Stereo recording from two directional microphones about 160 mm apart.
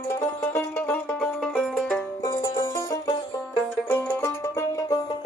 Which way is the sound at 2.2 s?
20° left (ahead or behind).